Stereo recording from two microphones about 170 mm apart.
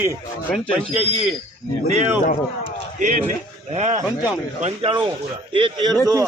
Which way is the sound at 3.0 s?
45° right (ahead or behind).